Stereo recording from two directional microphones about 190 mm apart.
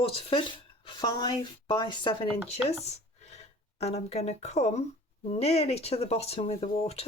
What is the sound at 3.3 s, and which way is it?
Speech, 35° left (ahead or behind).